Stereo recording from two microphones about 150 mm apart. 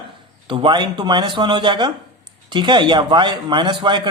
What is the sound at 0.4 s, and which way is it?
Speech, 35° right (ahead or behind).